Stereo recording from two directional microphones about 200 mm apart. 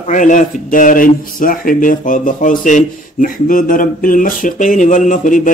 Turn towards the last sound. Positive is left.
turn(degrees=40)  # may be behind; listen again after turning